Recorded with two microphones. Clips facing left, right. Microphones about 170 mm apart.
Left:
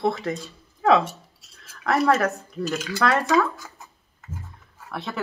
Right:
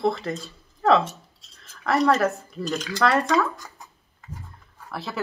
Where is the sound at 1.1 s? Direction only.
10° left (ahead or behind).